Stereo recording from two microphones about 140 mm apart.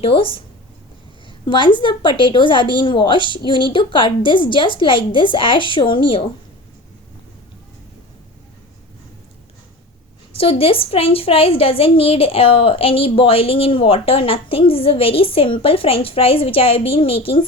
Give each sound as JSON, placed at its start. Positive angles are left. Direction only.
{"t": 0.0, "sound": "a woman's voice", "side_deg": 40}
{"t": 1.5, "sound": "a woman's voice", "side_deg": 35}
{"t": 10.3, "sound": "a woman's voice", "side_deg": 40}